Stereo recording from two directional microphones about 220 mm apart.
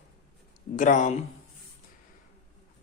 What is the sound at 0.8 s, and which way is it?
Speech, 35° left (ahead or behind).